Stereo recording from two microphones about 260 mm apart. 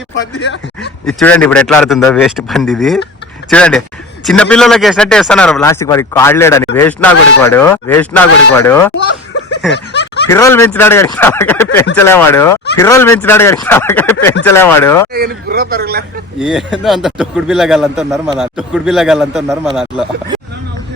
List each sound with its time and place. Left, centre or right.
1.0 s a man's voice: centre
9.7 s a sound: left
10.3 s speech: centre
15.1 s speech: right
16.4 s a man's voice: centre